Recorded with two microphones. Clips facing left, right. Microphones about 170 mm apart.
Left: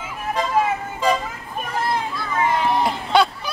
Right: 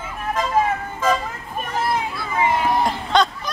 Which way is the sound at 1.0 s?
10° left (ahead or behind).